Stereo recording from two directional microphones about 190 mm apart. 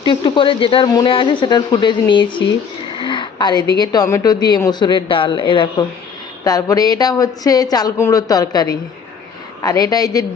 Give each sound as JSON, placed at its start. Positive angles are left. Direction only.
{"t": 0.0, "sound": "a woman's voice", "side_deg": 25}